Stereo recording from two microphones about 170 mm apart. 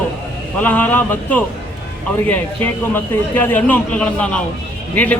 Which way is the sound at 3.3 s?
10° left (ahead or behind).